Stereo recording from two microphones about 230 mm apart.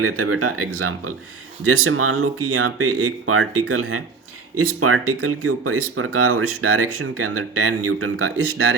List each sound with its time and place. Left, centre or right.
0.0 s speech: right